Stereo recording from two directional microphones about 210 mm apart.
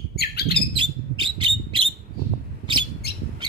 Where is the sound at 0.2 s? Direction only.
50° left (ahead or behind).